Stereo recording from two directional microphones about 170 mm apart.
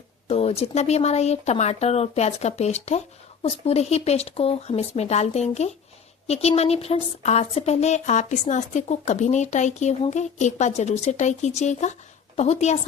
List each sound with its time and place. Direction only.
0.3 s a woman's voice: 35° left (ahead or behind)